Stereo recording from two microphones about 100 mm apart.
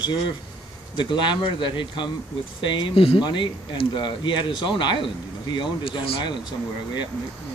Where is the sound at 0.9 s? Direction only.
50° left (ahead or behind).